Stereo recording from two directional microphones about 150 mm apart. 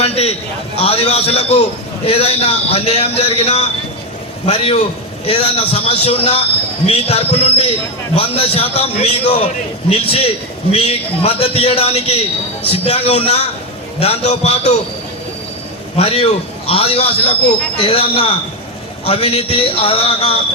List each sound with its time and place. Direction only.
0.0 s a sound: 40° left (ahead or behind)
0.8 s a man's voice: 40° left (ahead or behind)
16.0 s a man's voice: 40° left (ahead or behind)